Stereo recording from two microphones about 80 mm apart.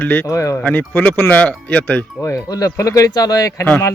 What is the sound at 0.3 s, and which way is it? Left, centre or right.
Speech, left.